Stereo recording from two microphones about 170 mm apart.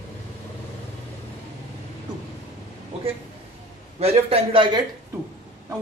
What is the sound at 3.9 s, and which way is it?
Speech, 35° right (ahead or behind).